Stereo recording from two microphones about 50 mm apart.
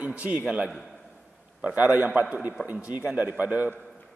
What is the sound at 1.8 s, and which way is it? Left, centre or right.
A man's voice, right.